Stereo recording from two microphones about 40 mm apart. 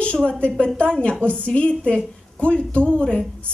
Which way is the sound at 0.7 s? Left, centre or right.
Left.